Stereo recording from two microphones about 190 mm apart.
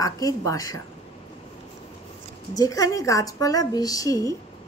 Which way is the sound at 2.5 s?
20° left (ahead or behind).